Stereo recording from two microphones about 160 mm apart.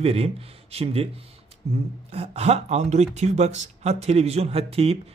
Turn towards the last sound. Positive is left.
turn(degrees=-40)  # may be behind; listen again after turning